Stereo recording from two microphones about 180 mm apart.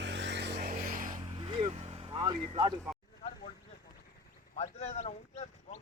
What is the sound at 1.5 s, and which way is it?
Vehicle, 35° right (ahead or behind).